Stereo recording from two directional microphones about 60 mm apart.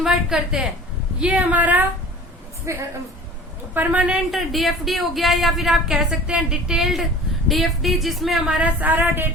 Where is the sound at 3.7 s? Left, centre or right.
Right.